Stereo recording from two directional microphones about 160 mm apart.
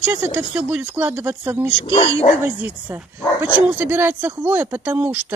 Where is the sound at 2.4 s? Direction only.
10° right (ahead or behind).